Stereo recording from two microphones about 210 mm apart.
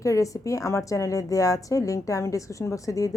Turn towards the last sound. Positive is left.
turn(degrees=15)  # may be behind; listen again after turning